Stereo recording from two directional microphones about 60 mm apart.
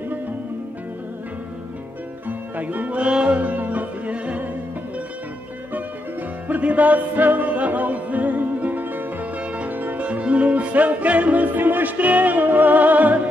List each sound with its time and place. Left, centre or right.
2.2 s music: right
6.4 s music: right